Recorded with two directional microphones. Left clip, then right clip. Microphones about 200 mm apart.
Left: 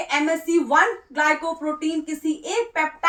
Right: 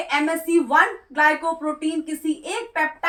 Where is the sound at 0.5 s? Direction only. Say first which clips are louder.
Right 1 dB; 20° left (ahead or behind).